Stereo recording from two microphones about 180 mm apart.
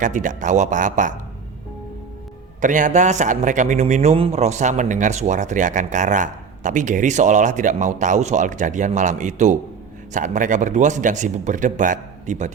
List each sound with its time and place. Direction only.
0.0 s a man's voice: 45° right (ahead or behind)
2.6 s a man's voice: 45° right (ahead or behind)